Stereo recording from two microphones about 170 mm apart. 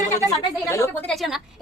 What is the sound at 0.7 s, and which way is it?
Speech, 15° left (ahead or behind).